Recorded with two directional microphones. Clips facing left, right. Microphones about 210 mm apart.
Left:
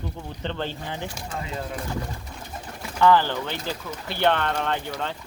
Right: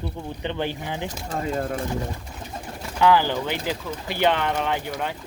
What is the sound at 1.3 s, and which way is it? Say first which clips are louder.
Speech: right 8 dB; 45° right (ahead or behind).